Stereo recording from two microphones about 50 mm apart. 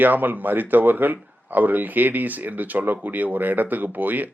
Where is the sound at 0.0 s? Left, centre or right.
Right.